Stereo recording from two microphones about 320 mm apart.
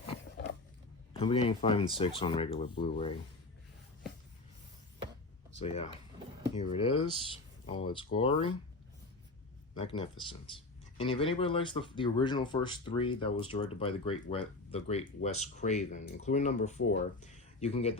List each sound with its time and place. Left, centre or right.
0.0 s a sound: centre
1.1 s speech: centre
5.5 s speech: centre
8.1 s speech: centre
9.7 s speech: centre